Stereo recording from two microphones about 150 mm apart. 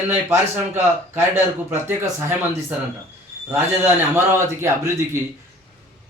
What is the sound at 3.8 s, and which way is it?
A man's voice, 15° right (ahead or behind).